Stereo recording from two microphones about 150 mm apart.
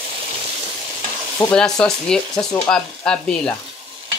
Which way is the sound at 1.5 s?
5° left (ahead or behind).